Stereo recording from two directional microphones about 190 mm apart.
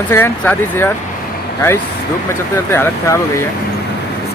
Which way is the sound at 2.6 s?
15° left (ahead or behind).